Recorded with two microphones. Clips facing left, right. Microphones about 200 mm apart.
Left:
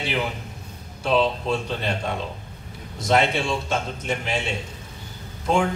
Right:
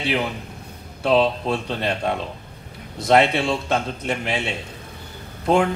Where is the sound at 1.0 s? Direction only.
60° right (ahead or behind).